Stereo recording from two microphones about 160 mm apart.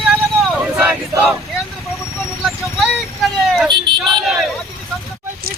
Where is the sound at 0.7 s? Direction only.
15° right (ahead or behind).